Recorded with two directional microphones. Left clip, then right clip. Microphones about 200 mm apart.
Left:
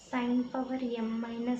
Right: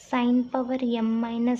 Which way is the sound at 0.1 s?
45° right (ahead or behind).